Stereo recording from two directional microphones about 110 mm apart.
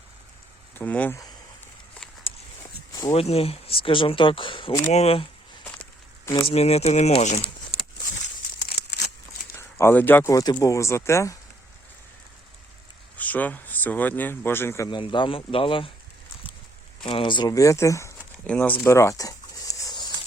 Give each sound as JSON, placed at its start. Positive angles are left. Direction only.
{"t": 0.8, "sound": "speech", "side_deg": 15}
{"t": 2.3, "sound": "walk", "side_deg": 55}
{"t": 3.1, "sound": "speech", "side_deg": 65}
{"t": 4.9, "sound": "speech", "side_deg": 70}
{"t": 6.2, "sound": "speech", "side_deg": 35}
{"t": 6.5, "sound": "speech", "side_deg": 70}
{"t": 9.6, "sound": "speech", "side_deg": 20}
{"t": 10.3, "sound": "speech", "side_deg": 35}
{"t": 13.1, "sound": "speech", "side_deg": 15}
{"t": 14.8, "sound": "speech", "side_deg": 50}
{"t": 17.0, "sound": "speech", "side_deg": 50}
{"t": 17.5, "sound": "speech", "side_deg": 30}
{"t": 18.4, "sound": "a sound", "side_deg": 10}